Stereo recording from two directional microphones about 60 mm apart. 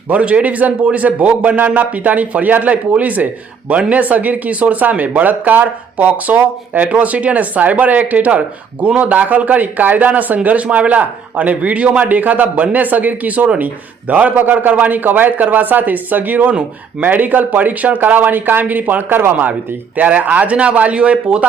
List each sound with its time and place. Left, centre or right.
0.1 s a man's voice: right